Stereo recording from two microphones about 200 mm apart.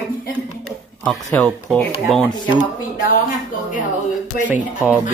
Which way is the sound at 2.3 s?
20° left (ahead or behind).